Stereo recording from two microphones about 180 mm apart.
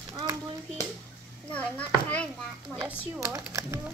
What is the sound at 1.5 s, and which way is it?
Children playing, 10° left (ahead or behind).